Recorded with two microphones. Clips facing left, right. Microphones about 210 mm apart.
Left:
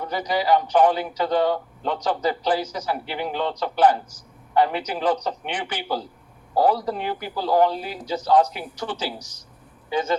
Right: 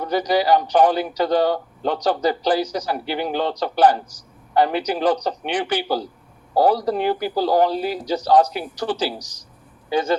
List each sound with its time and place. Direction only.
0.0 s speech: 35° right (ahead or behind)